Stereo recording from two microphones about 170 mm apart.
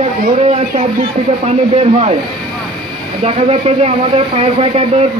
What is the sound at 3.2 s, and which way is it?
Speech, 35° right (ahead or behind).